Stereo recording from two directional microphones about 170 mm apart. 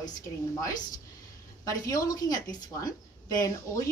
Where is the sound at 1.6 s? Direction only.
20° left (ahead or behind).